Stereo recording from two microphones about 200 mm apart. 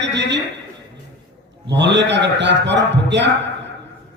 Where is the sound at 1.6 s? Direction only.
60° right (ahead or behind).